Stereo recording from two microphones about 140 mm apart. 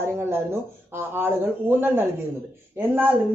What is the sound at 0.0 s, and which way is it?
A woman's voice, 15° right (ahead or behind).